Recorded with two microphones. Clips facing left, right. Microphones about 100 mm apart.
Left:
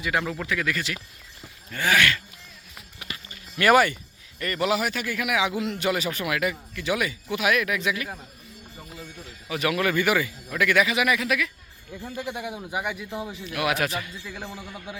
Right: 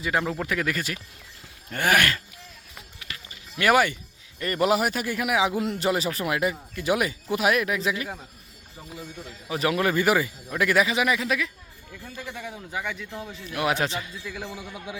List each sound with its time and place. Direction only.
0.0 s speech: 30° right (ahead or behind)
0.4 s speech: 40° right (ahead or behind)
3.6 s speech: 15° right (ahead or behind)
4.5 s speech: 45° right (ahead or behind)
9.5 s speech: 30° right (ahead or behind)
11.9 s speech: 20° left (ahead or behind)
13.5 s speech: 30° right (ahead or behind)
14.3 s a man's voice: centre (ahead or behind)
14.9 s speech: 15° right (ahead or behind)